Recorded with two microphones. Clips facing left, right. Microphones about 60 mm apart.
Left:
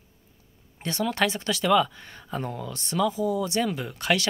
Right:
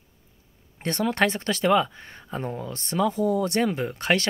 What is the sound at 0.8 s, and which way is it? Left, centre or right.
Speech, right.